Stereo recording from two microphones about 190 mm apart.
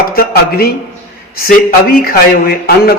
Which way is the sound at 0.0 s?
50° left (ahead or behind).